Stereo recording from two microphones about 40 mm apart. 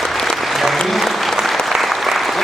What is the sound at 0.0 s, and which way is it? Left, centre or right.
Applause, centre.